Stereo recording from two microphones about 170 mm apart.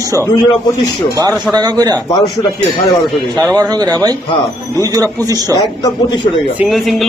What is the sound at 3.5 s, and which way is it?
Speech, 25° right (ahead or behind).